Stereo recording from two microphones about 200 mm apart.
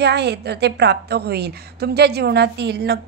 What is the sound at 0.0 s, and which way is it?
A woman's voice, 55° right (ahead or behind).